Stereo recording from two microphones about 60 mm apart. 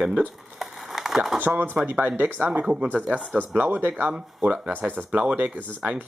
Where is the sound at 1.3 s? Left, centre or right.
Right.